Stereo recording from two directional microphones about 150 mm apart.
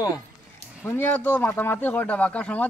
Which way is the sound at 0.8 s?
15° left (ahead or behind).